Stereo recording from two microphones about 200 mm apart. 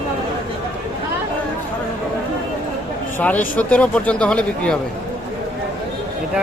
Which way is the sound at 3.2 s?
10° left (ahead or behind).